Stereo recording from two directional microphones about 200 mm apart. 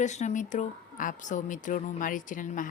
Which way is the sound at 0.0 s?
35° left (ahead or behind).